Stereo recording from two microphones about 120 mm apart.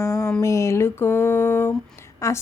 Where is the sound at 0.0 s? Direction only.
25° left (ahead or behind).